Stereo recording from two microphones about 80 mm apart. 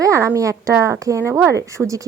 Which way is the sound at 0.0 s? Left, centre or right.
Right.